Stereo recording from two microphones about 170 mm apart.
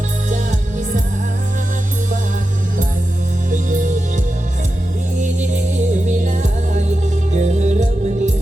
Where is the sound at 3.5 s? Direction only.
50° right (ahead or behind).